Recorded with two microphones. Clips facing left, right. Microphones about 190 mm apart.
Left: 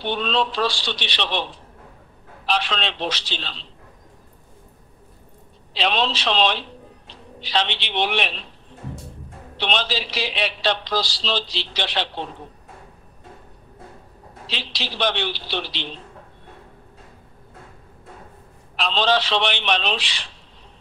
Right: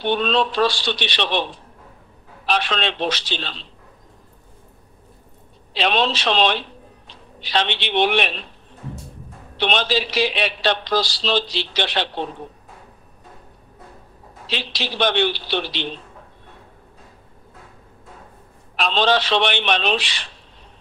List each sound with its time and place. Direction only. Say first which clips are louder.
0.0 s a man's voice: right 3 dB; 55° right (ahead or behind)
2.5 s a man's voice: right 2 dB; 55° right (ahead or behind)
5.8 s a man's voice: right 2 dB; 55° right (ahead or behind)
9.6 s a man's voice: right 4 dB; 55° right (ahead or behind)
14.5 s a man's voice: right 5 dB; 55° right (ahead or behind)
18.8 s a man's voice: right 2 dB; 55° right (ahead or behind)